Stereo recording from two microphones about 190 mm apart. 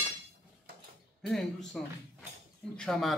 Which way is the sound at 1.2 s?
Centre (ahead or behind).